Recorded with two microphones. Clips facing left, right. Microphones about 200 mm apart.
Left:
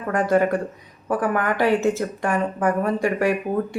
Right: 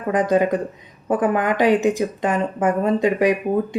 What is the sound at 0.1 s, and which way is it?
Speech, 20° right (ahead or behind).